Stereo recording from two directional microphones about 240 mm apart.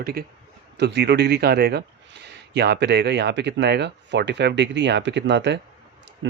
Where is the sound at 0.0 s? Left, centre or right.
Right.